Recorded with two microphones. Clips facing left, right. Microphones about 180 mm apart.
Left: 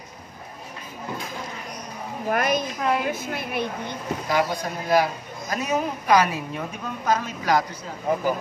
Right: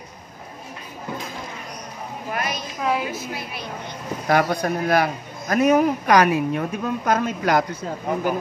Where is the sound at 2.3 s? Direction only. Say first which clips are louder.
Left 5 dB; 50° left (ahead or behind).